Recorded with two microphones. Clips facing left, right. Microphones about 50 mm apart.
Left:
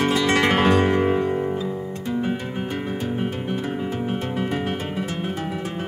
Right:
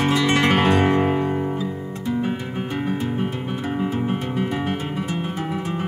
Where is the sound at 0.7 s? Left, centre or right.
Right.